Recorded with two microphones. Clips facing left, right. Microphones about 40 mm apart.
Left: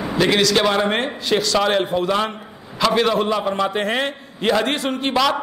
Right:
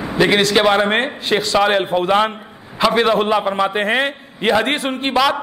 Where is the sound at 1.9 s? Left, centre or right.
Right.